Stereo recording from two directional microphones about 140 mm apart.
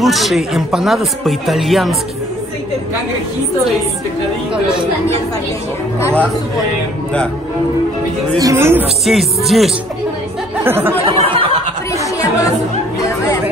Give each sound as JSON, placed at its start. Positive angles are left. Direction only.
{"t": 0.0, "sound": "speech", "side_deg": 0}
{"t": 8.4, "sound": "speech", "side_deg": -20}
{"t": 9.0, "sound": "speech", "side_deg": 0}
{"t": 10.6, "sound": "speech", "side_deg": -15}
{"t": 11.2, "sound": "speech", "side_deg": -40}